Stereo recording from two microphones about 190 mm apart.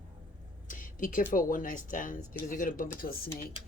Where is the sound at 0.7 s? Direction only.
45° left (ahead or behind).